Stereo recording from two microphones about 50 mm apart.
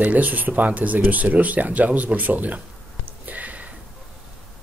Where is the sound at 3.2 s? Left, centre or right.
Right.